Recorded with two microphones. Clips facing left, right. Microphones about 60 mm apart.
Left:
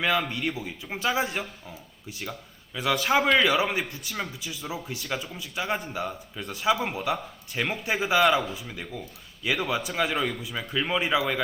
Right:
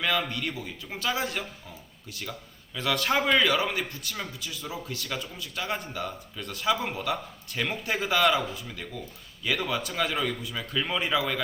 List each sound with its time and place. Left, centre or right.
0.3 s speech: centre
8.2 s a man's voice: centre
8.5 s speech: centre